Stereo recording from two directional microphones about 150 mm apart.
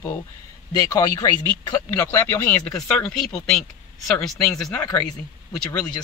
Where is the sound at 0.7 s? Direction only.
25° left (ahead or behind); by 4.6 s 10° left (ahead or behind).